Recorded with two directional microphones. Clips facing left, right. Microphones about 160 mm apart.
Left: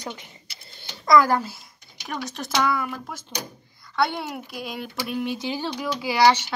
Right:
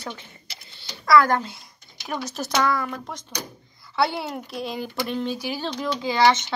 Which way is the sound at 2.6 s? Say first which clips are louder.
Right 1 dB; 10° left (ahead or behind).